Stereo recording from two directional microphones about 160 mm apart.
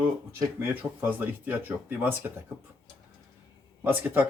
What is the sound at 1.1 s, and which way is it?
Speech, 10° right (ahead or behind).